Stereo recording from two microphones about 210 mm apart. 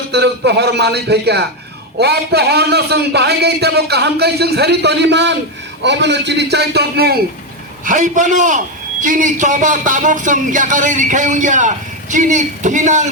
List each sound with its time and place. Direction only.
0.1 s a man's voice: 55° right (ahead or behind)
7.9 s a man's voice: 40° right (ahead or behind)